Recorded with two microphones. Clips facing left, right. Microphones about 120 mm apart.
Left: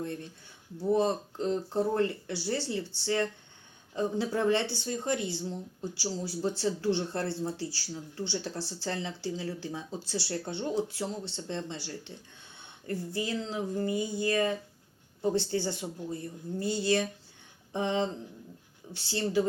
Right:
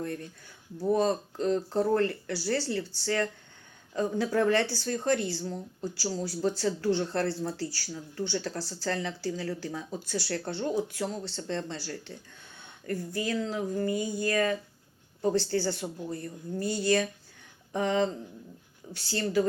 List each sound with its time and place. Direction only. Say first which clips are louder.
0.0 s speech: right 1 dB; 20° left (ahead or behind)